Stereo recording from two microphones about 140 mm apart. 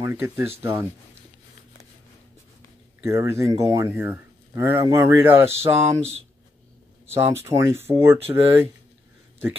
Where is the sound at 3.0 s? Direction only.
20° right (ahead or behind).